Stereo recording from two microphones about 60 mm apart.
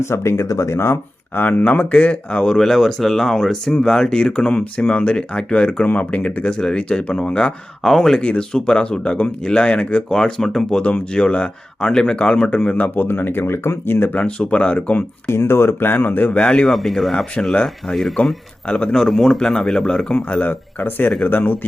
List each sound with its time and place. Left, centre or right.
0.0 s speech: left
1.4 s speech: left
7.9 s speech: centre
8.2 s speech: centre
10.8 s speech: centre; by 14.2 s left
14.2 s speech: centre
15.3 s speech: left
16.4 s speech: centre
16.7 s speech: centre
17.9 s speech: centre
19.0 s speech: centre
19.4 s speech: centre
20.5 s speech: left